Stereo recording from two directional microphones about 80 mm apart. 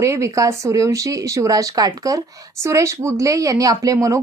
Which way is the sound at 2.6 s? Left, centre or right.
Right.